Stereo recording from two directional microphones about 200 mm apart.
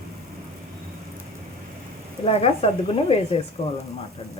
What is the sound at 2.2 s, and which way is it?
Speech, 30° left (ahead or behind).